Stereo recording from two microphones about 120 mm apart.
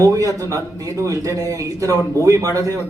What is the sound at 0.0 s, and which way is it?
A man's voice, 30° right (ahead or behind).